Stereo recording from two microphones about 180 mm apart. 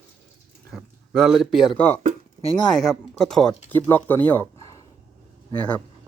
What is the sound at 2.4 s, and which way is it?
Speech, 30° left (ahead or behind).